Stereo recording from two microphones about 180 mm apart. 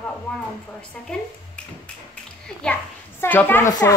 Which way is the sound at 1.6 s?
5° left (ahead or behind).